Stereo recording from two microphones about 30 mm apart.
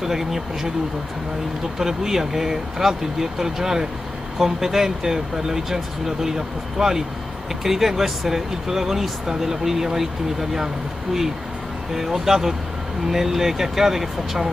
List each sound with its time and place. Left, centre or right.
0.0 s speech: centre
1.8 s speech: centre
11.9 s speech: centre